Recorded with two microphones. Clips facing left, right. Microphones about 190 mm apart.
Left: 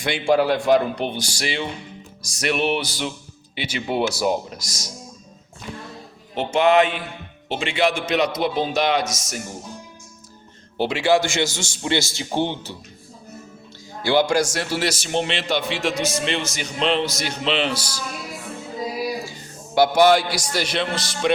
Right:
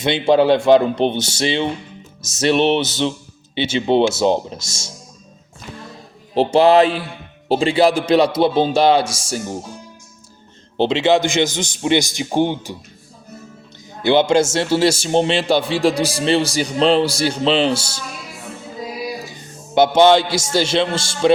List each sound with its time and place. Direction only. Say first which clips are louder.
0.0 s speech: right 5 dB; 25° right (ahead or behind)
6.3 s a man's voice: right 5 dB; 35° right (ahead or behind)
10.8 s speech: right 4 dB; 25° right (ahead or behind)
14.0 s a man's voice: right 5 dB; 20° right (ahead or behind)
19.2 s a man's voice: even; 20° right (ahead or behind)